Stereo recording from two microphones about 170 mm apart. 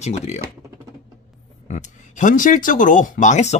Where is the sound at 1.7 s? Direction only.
45° left (ahead or behind).